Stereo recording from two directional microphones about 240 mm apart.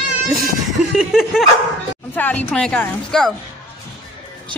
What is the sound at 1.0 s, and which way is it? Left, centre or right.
A woman's voice, centre.